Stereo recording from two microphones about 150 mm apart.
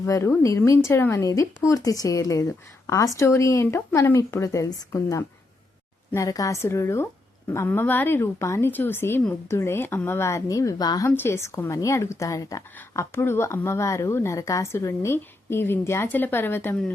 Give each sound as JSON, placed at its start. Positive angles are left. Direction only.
{"t": 0.0, "sound": "a woman's voice", "side_deg": 20}